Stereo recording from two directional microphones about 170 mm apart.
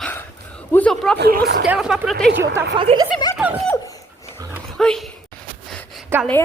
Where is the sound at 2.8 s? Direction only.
30° right (ahead or behind).